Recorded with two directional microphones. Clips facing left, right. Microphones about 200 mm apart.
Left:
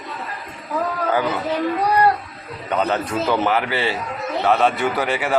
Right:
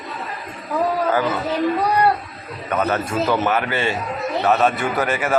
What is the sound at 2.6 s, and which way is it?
A man's voice, 20° left (ahead or behind).